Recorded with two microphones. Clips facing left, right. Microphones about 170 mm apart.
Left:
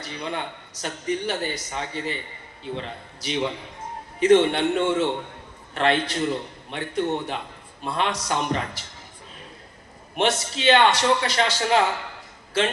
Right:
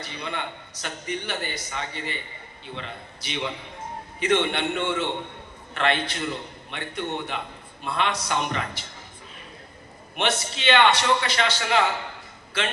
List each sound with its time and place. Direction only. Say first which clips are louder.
0.0 s a man's voice: left 2 dB; 35° left (ahead or behind)
10.2 s a man's voice: left 3 dB; 40° left (ahead or behind)